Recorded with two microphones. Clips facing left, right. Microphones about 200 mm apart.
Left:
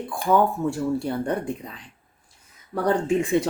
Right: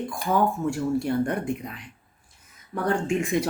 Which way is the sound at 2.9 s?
35° left (ahead or behind).